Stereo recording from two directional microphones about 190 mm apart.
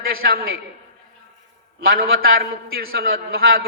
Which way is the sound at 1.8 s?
50° right (ahead or behind).